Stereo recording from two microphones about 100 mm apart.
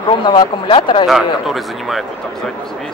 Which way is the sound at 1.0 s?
Centre (ahead or behind).